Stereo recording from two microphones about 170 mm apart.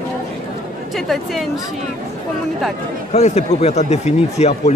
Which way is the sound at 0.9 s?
Centre (ahead or behind).